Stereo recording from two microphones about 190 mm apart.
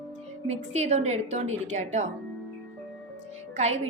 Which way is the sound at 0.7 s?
35° right (ahead or behind).